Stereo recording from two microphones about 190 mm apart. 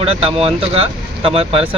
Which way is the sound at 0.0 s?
30° right (ahead or behind).